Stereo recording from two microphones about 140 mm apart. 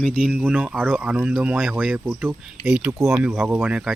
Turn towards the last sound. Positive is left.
turn(degrees=-10)  # may be behind; listen again after turning